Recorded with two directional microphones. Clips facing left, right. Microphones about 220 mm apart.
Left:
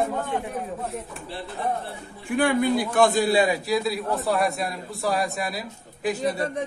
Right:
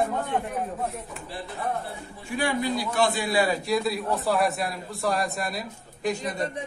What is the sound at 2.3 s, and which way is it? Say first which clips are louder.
Speech: left 5 dB; 55° left (ahead or behind).